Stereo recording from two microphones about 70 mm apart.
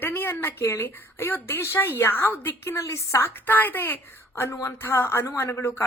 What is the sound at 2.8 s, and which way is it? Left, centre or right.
A woman's voice, left.